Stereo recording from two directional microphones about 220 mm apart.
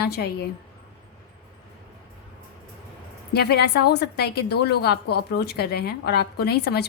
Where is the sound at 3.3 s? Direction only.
45° left (ahead or behind).